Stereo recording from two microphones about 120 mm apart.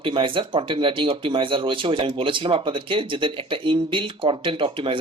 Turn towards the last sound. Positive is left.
turn(degrees=-45)  # may be behind; listen again after turning